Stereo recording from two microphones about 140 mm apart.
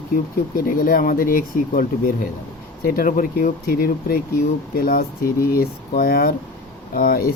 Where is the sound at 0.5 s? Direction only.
90° left.